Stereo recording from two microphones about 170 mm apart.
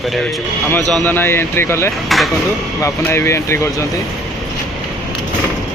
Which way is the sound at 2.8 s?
15° left (ahead or behind).